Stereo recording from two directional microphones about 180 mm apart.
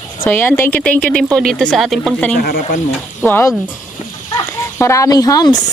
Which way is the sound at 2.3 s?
50° left (ahead or behind).